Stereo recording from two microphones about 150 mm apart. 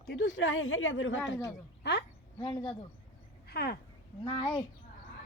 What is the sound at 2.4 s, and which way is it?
Speech, 35° left (ahead or behind).